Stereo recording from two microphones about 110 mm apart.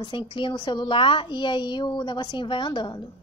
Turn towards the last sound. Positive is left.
turn(degrees=45)  # may be behind; listen again after turning